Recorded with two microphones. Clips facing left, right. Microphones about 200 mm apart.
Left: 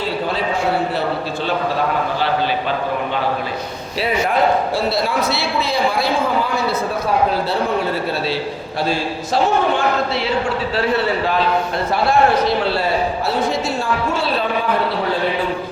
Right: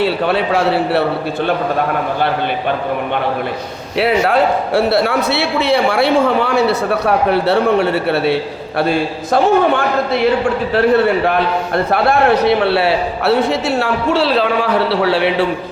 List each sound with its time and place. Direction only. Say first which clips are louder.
0.0 s a man's voice: right 6 dB; 70° right (ahead or behind)
3.9 s a man's voice: right 5 dB; 70° right (ahead or behind)